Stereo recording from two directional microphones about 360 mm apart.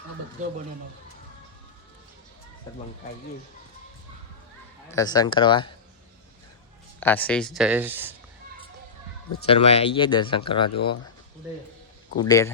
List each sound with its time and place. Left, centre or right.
4.9 s speech: centre
7.0 s speech: centre
9.5 s speech: centre
12.1 s speech: centre